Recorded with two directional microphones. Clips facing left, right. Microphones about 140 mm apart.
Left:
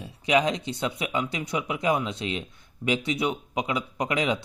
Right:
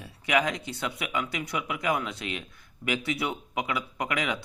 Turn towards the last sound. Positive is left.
turn(degrees=25)  # may be behind; listen again after turning